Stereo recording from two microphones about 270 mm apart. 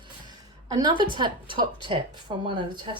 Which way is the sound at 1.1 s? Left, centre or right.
Centre.